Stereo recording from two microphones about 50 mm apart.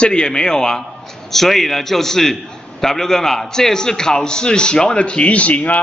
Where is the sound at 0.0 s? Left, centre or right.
Centre.